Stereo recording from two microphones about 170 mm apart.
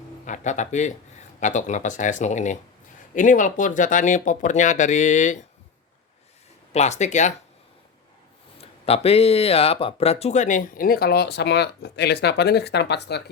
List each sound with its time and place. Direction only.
0.3 s speech: 45° left (ahead or behind)
6.7 s speech: 40° left (ahead or behind)
8.5 s speech: 35° left (ahead or behind); by 13.3 s 80° left